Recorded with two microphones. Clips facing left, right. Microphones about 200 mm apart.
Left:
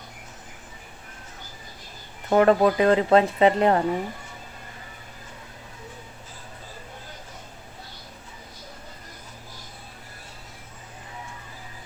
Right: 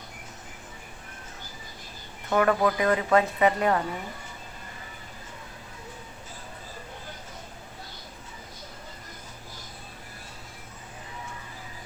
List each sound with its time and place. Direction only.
2.3 s speech: 30° left (ahead or behind)